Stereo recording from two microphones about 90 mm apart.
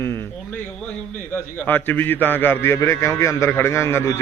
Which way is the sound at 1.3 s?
20° left (ahead or behind).